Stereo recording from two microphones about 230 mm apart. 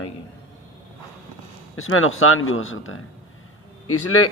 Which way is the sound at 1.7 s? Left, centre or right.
Left.